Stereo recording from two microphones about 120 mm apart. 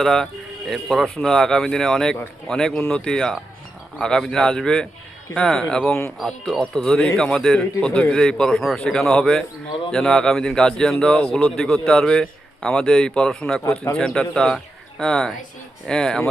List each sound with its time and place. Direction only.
0.0 s a man's voice: 5° left (ahead or behind)
13.7 s speech: 20° left (ahead or behind)
14.0 s a man's voice: 5° left (ahead or behind)